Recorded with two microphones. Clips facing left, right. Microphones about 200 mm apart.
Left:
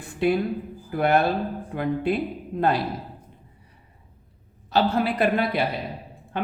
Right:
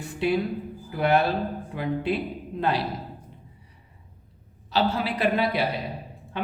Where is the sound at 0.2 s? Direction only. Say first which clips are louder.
Left 2 dB; 50° left (ahead or behind).